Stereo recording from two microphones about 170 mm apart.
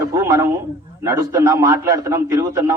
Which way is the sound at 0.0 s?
20° right (ahead or behind).